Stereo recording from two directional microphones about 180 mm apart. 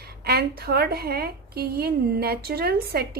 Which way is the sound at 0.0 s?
60° right (ahead or behind).